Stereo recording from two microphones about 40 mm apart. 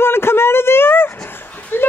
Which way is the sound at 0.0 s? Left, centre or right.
Left.